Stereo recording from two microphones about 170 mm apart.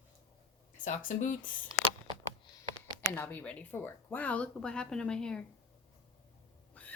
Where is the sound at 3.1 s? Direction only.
10° left (ahead or behind).